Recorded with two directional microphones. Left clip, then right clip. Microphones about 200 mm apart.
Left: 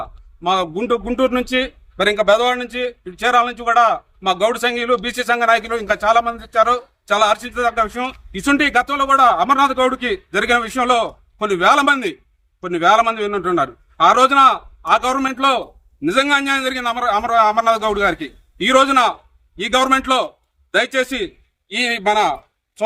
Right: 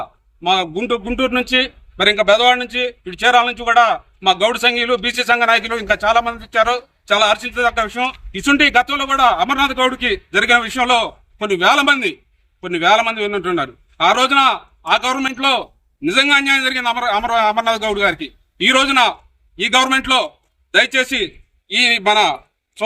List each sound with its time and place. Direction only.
0.0 s a man's voice: 5° left (ahead or behind)